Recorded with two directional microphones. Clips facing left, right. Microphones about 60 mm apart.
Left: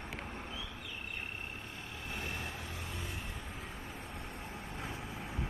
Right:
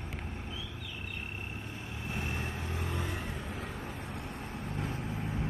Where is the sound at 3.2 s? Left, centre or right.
Right.